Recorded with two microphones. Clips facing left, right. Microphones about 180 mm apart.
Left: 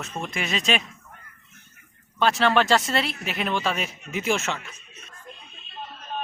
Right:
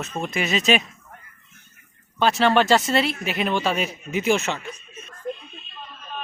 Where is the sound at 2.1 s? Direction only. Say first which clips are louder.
Right 2 dB; centre (ahead or behind).